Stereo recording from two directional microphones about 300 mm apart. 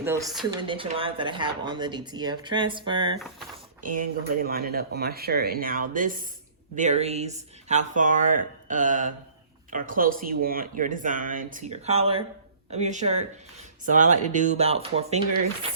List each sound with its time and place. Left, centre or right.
0.0 s speech: centre
3.8 s speech: right